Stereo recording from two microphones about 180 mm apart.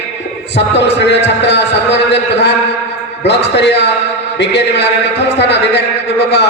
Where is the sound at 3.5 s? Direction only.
70° left (ahead or behind).